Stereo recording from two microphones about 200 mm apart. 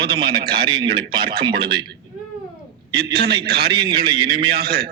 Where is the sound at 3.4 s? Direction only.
50° right (ahead or behind).